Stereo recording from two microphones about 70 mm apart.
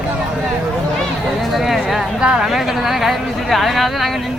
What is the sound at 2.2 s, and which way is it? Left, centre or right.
Speech, centre.